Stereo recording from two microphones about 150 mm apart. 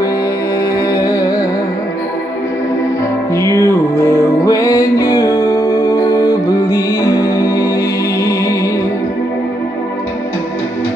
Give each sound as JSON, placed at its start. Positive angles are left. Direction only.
{"t": 0.6, "sound": "music", "side_deg": 20}
{"t": 3.3, "sound": "music", "side_deg": 20}